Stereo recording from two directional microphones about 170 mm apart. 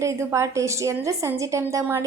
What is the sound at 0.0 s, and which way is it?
A woman's voice, 15° right (ahead or behind).